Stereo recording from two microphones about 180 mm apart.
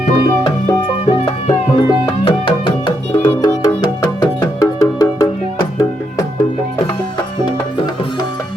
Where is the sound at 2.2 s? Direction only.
25° left (ahead or behind).